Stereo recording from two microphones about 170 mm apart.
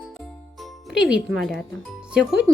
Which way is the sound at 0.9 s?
5° right (ahead or behind).